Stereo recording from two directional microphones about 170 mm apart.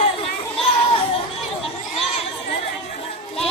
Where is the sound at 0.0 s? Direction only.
35° left (ahead or behind).